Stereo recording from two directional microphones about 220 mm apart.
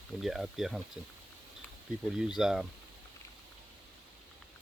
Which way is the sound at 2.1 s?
5° right (ahead or behind).